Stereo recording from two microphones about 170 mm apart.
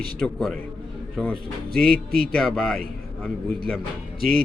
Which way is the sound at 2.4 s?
Centre (ahead or behind).